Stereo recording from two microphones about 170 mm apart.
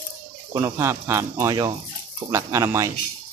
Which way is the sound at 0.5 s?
20° right (ahead or behind).